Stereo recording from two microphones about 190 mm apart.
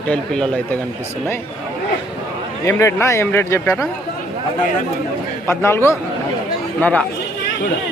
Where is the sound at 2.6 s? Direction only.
15° left (ahead or behind).